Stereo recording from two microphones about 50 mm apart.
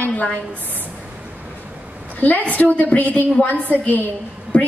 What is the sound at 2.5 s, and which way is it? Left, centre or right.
A woman's voice, left.